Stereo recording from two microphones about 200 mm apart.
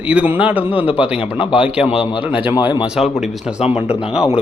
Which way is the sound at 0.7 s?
25° left (ahead or behind).